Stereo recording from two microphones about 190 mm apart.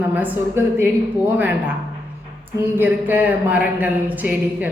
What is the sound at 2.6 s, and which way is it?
A woman's voice, 10° right (ahead or behind).